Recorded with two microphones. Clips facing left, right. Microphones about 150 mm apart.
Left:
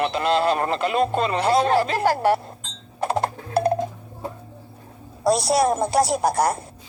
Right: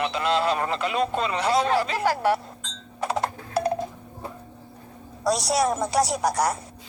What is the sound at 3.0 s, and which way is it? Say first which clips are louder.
Music: left 3 dB; 55° left (ahead or behind).